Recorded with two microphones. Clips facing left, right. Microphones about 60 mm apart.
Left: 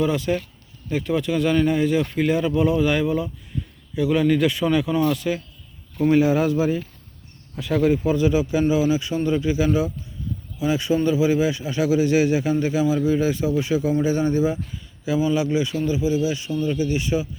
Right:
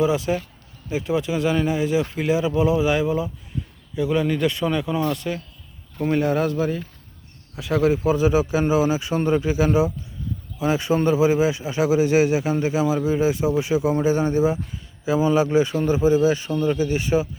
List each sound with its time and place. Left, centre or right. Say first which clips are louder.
0.0 s a man's voice: right 1 dB; centre; by 17.2 s right